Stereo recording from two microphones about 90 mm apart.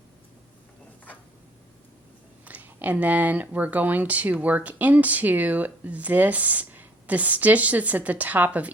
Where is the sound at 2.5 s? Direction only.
15° right (ahead or behind).